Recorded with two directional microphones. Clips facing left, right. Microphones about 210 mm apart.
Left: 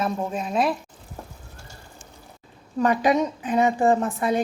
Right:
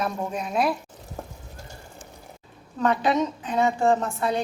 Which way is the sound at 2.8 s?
10° left (ahead or behind).